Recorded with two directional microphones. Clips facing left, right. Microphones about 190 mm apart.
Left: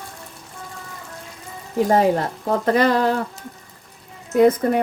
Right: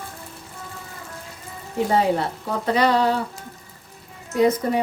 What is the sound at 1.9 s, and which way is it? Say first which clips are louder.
Speech: left 3 dB; 50° left (ahead or behind).